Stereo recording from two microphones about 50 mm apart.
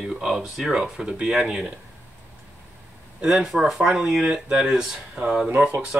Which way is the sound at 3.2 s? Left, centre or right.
Centre.